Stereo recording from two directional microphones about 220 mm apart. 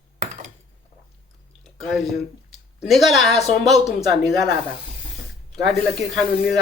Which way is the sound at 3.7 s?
Centre (ahead or behind).